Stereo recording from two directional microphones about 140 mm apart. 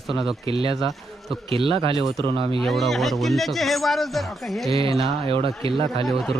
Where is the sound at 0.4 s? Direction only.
40° right (ahead or behind).